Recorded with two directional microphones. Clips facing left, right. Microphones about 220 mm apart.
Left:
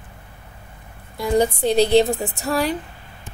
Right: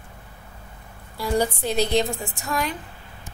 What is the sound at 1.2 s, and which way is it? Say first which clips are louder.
Speech: left 5 dB; 25° left (ahead or behind).